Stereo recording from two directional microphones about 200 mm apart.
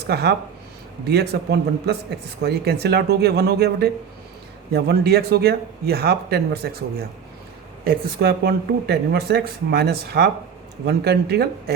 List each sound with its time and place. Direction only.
0.1 s speech: 55° right (ahead or behind)